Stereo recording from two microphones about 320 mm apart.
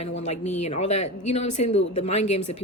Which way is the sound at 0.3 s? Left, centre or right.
Left.